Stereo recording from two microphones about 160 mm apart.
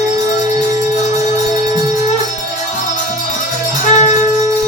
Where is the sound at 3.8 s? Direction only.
50° left (ahead or behind).